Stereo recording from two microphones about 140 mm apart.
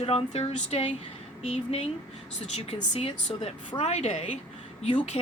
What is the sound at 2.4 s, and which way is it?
Speech, 50° left (ahead or behind).